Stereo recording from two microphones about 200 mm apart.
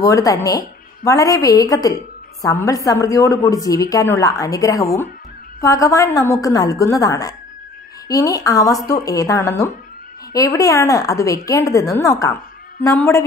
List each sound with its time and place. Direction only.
0.0 s a woman's voice: 15° left (ahead or behind)